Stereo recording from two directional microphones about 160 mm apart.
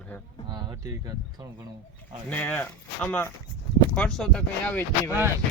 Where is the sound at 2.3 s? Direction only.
10° left (ahead or behind).